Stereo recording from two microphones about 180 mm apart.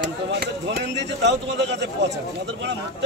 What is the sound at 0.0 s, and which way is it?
Speech, 70° right (ahead or behind).